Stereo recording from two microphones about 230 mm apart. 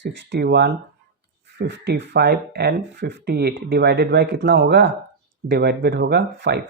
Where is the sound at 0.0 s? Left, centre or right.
Right.